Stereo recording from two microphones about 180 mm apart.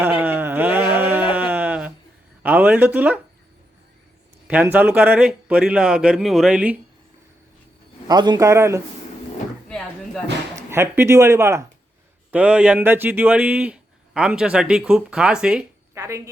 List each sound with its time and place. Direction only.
0.0 s a sound: 10° right (ahead or behind)
2.4 s speech: 10° right (ahead or behind)
4.4 s a man's voice: 10° right (ahead or behind)
8.0 s a man's voice: 25° right (ahead or behind)
10.7 s a man's voice: 15° right (ahead or behind)
16.0 s a man's voice: 15° right (ahead or behind)